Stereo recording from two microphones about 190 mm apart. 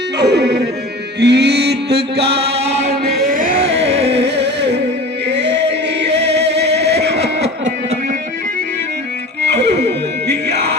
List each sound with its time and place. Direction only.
0.2 s a sound: 60° right (ahead or behind)
1.2 s music: 60° right (ahead or behind)
2.2 s music: 30° right (ahead or behind); by 3.5 s 45° right (ahead or behind)
3.6 s a sound: 30° right (ahead or behind)
4.0 s music: 60° right (ahead or behind)
9.5 s music: 60° right (ahead or behind)